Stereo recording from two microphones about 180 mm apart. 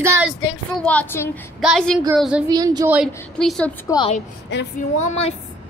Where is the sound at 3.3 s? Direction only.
5° left (ahead or behind).